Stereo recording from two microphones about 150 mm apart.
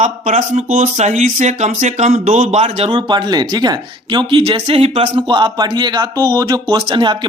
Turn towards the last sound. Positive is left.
turn(degrees=-30)  # may be behind; listen again after turning